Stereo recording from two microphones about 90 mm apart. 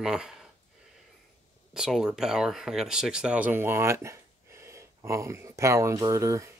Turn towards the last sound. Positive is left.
turn(degrees=-35)  # may be behind; listen again after turning